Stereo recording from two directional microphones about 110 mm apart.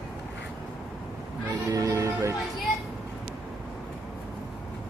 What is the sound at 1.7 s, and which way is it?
Music, 30° right (ahead or behind).